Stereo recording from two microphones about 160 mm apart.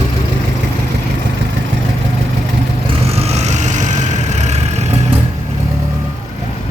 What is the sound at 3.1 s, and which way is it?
Vehicle, 40° right (ahead or behind).